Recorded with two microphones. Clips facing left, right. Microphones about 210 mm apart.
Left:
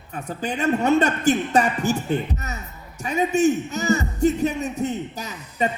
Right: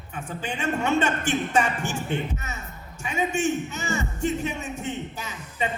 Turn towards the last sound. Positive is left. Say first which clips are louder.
# left 5 dB
turn(degrees=40)  # may be behind; listen again after turning